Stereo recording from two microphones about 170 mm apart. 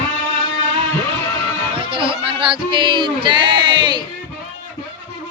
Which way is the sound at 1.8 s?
30° right (ahead or behind).